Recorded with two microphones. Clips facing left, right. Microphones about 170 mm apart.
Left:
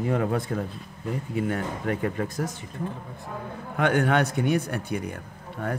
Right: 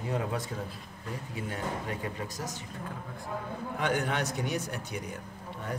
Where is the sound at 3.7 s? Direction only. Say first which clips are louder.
Left 8 dB; 60° left (ahead or behind).